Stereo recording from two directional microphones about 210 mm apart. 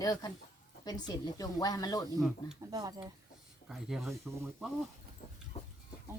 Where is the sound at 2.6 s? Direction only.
20° right (ahead or behind).